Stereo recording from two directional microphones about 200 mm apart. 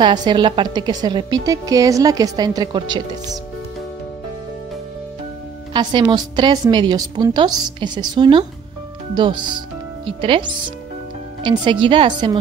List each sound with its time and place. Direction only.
0.0 s a woman's voice: 20° right (ahead or behind)
5.7 s a woman's voice: 20° right (ahead or behind)